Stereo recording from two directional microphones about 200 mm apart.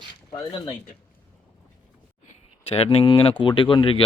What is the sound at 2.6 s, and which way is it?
Speech, 30° left (ahead or behind).